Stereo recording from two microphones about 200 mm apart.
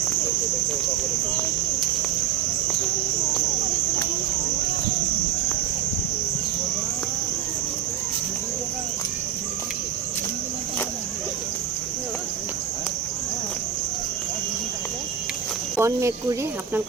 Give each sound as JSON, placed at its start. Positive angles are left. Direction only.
{"t": 15.8, "sound": "speech", "side_deg": -15}